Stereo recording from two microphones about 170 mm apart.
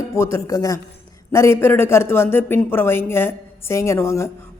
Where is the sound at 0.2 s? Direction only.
15° left (ahead or behind).